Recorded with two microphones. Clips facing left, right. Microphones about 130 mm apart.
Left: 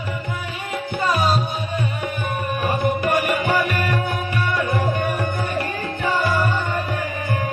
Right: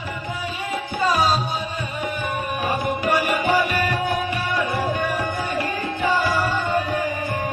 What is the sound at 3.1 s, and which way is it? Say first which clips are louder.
Music: right 3 dB; 50° left (ahead or behind).